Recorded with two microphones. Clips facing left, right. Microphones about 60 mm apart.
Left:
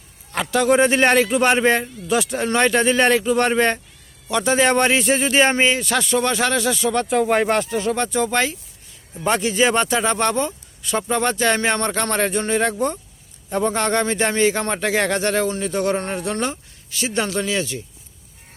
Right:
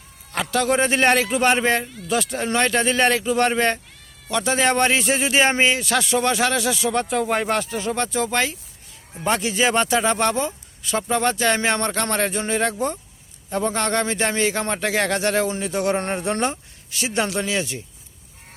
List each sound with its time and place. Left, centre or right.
0.3 s speech: centre
16.0 s speech: right
17.0 s speech: centre